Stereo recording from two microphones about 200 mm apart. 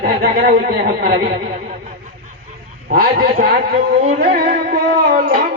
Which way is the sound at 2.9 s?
50° right (ahead or behind).